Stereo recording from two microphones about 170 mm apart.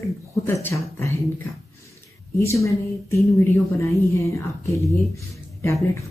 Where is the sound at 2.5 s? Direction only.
15° left (ahead or behind).